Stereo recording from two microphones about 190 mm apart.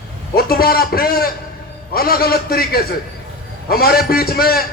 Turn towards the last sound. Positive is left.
turn(degrees=55)  # may be behind; listen again after turning